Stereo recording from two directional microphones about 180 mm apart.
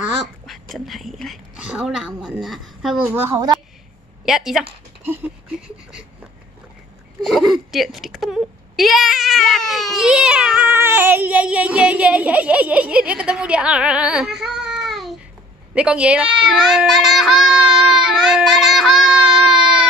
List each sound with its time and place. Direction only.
0.5 s speech: centre (ahead or behind)
3.2 s speech: 15° right (ahead or behind)
4.3 s speech: centre (ahead or behind)
7.2 s speech: centre (ahead or behind)